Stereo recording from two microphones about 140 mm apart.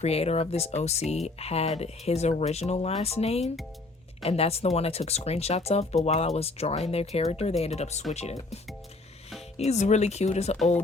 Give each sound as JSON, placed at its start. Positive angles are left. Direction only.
{"t": 0.0, "sound": "speech", "side_deg": 50}
{"t": 3.4, "sound": "speech", "side_deg": 0}
{"t": 4.2, "sound": "speech", "side_deg": 45}
{"t": 9.6, "sound": "speech", "side_deg": 55}